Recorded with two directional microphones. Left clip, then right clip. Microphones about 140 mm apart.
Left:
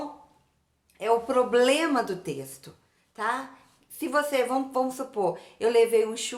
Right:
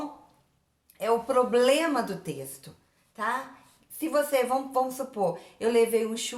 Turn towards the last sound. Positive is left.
turn(degrees=20)  # may be behind; listen again after turning